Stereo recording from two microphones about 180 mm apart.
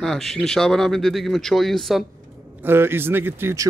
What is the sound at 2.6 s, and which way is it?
A man's voice, 10° right (ahead or behind).